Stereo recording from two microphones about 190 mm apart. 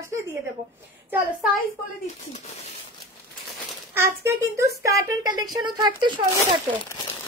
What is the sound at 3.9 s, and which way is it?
A woman's voice, 15° right (ahead or behind).